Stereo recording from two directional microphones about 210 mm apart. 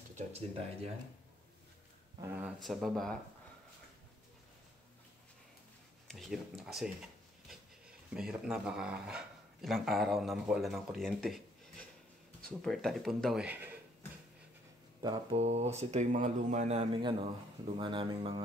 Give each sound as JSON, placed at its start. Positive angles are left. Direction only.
{"t": 0.3, "sound": "speech", "side_deg": -30}
{"t": 2.3, "sound": "speech", "side_deg": -5}
{"t": 6.0, "sound": "speech", "side_deg": 0}
{"t": 8.1, "sound": "speech", "side_deg": -5}
{"t": 12.4, "sound": "speech", "side_deg": 0}
{"t": 15.0, "sound": "speech", "side_deg": -25}